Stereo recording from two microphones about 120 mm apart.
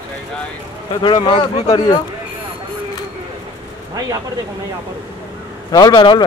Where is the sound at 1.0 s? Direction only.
40° left (ahead or behind).